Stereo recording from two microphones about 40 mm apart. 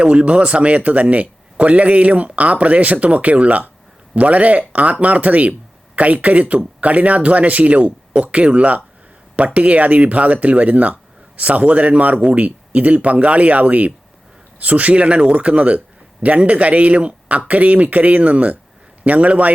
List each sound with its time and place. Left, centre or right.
0.0 s speech: right